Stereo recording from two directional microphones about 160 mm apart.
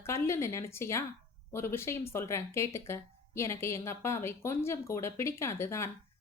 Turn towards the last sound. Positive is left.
turn(degrees=15)  # may be behind; listen again after turning